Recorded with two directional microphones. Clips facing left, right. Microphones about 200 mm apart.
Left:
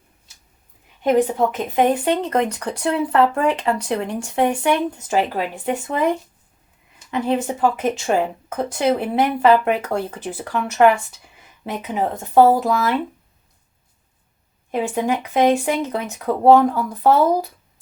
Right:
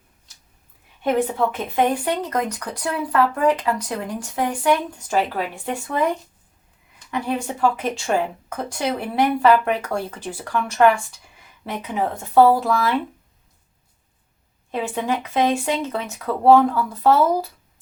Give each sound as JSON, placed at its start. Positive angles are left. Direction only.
{"t": 1.0, "sound": "speech", "side_deg": 15}
{"t": 7.1, "sound": "speech", "side_deg": 20}
{"t": 14.7, "sound": "speech", "side_deg": 15}